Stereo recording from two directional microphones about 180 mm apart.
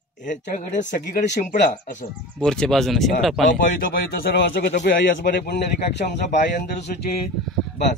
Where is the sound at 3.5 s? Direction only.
50° left (ahead or behind).